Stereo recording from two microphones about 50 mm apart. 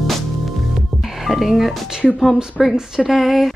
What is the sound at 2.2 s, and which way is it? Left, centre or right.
Speech, centre.